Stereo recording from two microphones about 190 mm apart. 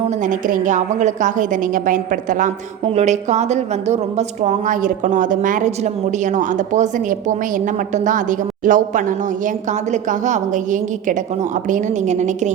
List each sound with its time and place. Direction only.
0.3 s a woman's voice: 45° right (ahead or behind)